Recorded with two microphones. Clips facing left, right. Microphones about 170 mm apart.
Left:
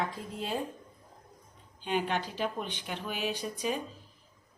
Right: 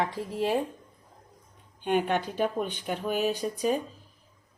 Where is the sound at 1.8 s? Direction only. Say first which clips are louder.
Right 5 dB; 55° right (ahead or behind).